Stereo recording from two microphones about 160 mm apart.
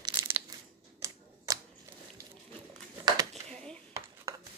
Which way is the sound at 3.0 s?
25° right (ahead or behind).